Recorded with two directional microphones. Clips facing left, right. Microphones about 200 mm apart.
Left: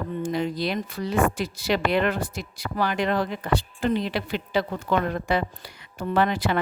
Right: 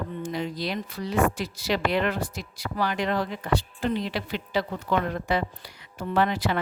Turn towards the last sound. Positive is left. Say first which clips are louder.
# left 2 dB
turn(degrees=55)  # may be behind; listen again after turning